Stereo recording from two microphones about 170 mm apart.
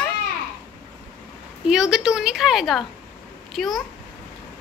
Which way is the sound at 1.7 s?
5° right (ahead or behind).